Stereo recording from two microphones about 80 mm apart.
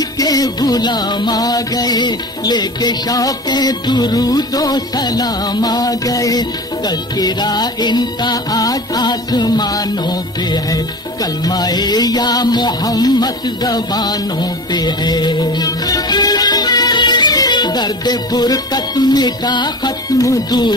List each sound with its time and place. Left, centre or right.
0.2 s music: left
20.2 s music: left